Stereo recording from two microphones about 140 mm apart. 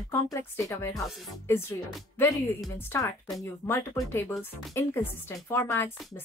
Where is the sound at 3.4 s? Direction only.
15° left (ahead or behind).